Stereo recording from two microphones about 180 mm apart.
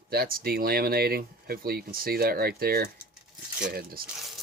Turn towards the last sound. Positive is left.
turn(degrees=-55)  # may be behind; listen again after turning